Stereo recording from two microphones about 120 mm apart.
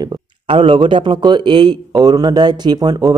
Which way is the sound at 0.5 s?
45° right (ahead or behind).